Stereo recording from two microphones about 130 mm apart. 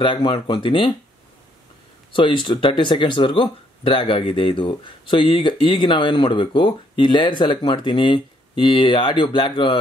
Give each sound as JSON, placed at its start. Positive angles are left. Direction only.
{"t": 0.0, "sound": "speech", "side_deg": 40}
{"t": 2.1, "sound": "speech", "side_deg": 40}